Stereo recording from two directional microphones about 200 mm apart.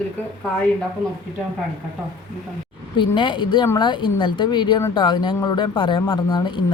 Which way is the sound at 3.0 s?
25° left (ahead or behind).